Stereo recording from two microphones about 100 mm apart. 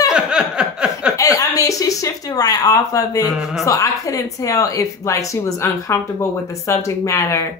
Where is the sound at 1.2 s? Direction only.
35° left (ahead or behind).